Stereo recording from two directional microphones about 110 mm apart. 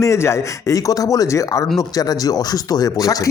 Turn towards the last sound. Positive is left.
turn(degrees=35)  # may be behind; listen again after turning